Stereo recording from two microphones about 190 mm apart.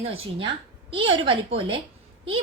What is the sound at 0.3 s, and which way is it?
A woman's voice, 25° right (ahead or behind).